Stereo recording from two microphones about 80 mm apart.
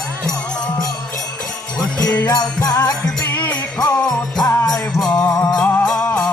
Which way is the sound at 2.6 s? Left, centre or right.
Left.